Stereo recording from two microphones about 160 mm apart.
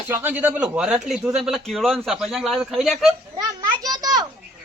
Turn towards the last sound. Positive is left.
turn(degrees=-25)  # may be behind; listen again after turning